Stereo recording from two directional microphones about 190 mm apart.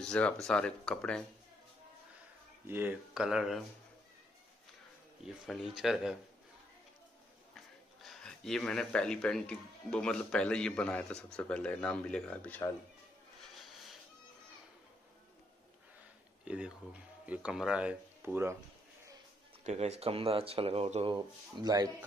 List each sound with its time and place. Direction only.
0.0 s speech: 5° left (ahead or behind)
2.6 s speech: 10° right (ahead or behind)
5.2 s speech: centre (ahead or behind)
7.5 s speech: centre (ahead or behind)
13.4 s a sound: centre (ahead or behind)
16.4 s speech: 5° right (ahead or behind)
19.6 s speech: 35° right (ahead or behind); by 21.9 s 20° right (ahead or behind)